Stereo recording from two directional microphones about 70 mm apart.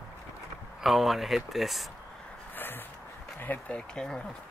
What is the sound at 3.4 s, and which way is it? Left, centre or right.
Speech, left.